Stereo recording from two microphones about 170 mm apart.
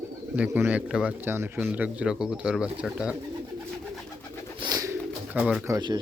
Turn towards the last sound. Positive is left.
turn(degrees=-25)  # may be behind; listen again after turning